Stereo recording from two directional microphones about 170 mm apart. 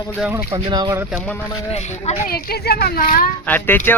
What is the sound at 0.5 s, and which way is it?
Speech, 25° right (ahead or behind).